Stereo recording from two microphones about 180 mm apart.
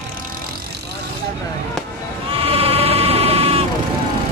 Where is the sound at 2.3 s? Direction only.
35° right (ahead or behind).